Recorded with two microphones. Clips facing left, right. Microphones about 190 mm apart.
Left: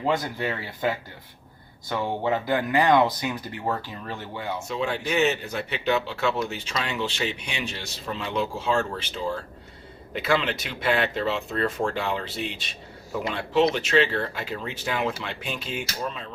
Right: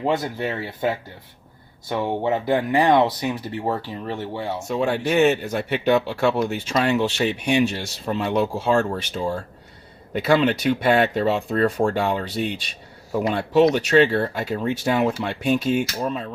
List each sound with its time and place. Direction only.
0.0 s speech: 25° right (ahead or behind)
4.7 s speech: 50° right (ahead or behind)